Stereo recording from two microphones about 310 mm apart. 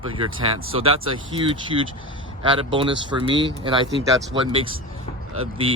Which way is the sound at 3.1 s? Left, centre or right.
Centre.